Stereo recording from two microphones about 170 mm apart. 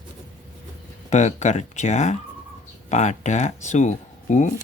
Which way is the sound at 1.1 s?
45° left (ahead or behind).